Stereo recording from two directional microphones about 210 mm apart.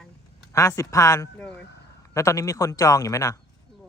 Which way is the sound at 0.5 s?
15° left (ahead or behind).